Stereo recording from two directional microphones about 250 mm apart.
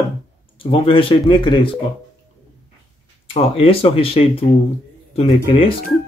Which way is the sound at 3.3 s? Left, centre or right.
Left.